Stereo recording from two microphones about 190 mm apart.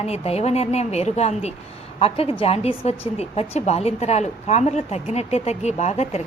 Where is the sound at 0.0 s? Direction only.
35° left (ahead or behind).